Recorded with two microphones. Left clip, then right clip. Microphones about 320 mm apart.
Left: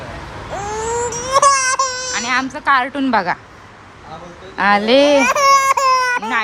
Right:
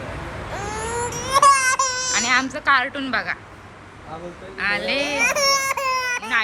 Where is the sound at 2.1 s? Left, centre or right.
Centre.